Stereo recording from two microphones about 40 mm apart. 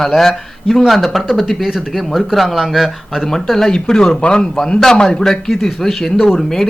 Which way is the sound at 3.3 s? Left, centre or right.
Centre.